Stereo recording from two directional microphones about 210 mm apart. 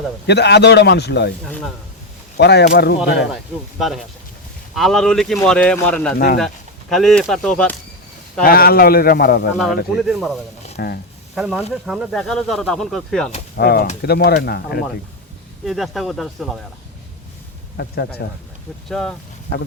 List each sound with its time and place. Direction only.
0.3 s a man's voice: 55° left (ahead or behind)
2.4 s a man's voice: 50° left (ahead or behind)
3.3 s speech: centre (ahead or behind)
6.1 s a man's voice: 45° left (ahead or behind)
6.9 s speech: centre (ahead or behind)
8.4 s a man's voice: 45° left (ahead or behind)
9.6 s speech: centre (ahead or behind)
10.8 s speech: 50° left (ahead or behind)
11.3 s speech: 5° right (ahead or behind)
13.6 s a man's voice: 50° left (ahead or behind)
15.6 s speech: centre (ahead or behind)
17.7 s a man's voice: 55° left (ahead or behind)
18.9 s speech: centre (ahead or behind)